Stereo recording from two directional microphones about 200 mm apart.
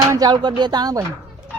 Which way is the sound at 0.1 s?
20° right (ahead or behind).